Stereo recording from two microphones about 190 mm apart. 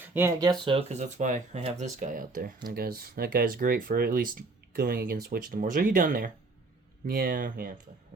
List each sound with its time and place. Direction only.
0.0 s speech: 10° right (ahead or behind)
0.6 s speech: 30° right (ahead or behind); by 7.7 s 50° right (ahead or behind)